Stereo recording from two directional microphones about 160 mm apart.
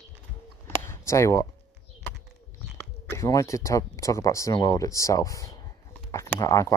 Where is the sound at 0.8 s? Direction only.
20° left (ahead or behind).